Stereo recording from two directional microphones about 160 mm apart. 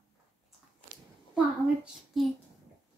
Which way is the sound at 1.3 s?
5° right (ahead or behind).